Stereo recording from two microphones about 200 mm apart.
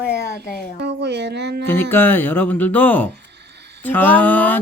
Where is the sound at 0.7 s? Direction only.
60° right (ahead or behind).